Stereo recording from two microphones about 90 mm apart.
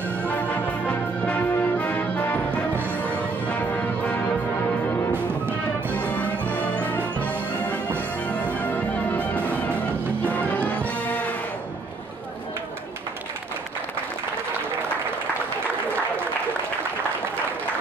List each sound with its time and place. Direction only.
0.2 s music: 20° left (ahead or behind)
2.7 s music: 25° right (ahead or behind)
3.0 s music: 15° left (ahead or behind)
5.9 s music: 15° left (ahead or behind)